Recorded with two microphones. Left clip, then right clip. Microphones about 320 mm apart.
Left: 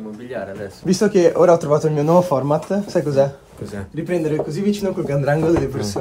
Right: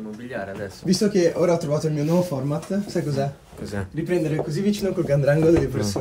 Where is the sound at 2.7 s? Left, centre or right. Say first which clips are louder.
Left 6 dB; left.